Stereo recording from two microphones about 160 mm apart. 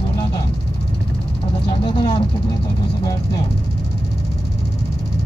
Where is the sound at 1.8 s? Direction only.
30° left (ahead or behind).